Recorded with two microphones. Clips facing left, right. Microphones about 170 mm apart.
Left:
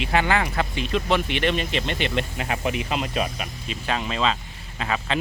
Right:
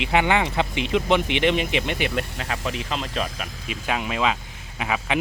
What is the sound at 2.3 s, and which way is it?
Speech, 15° left (ahead or behind).